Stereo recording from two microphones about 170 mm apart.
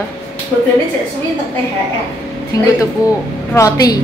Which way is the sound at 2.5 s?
20° left (ahead or behind).